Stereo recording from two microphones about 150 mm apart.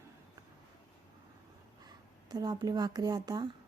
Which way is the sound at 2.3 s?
25° right (ahead or behind).